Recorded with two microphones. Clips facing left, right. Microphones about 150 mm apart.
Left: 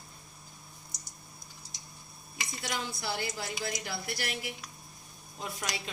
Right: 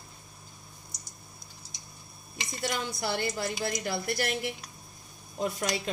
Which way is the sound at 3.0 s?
55° right (ahead or behind).